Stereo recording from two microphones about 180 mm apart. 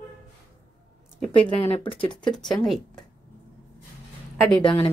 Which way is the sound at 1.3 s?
30° left (ahead or behind).